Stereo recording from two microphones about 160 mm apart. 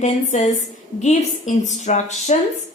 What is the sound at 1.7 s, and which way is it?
Speech, 50° left (ahead or behind).